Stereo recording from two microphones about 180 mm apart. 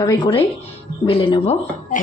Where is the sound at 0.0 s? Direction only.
25° left (ahead or behind).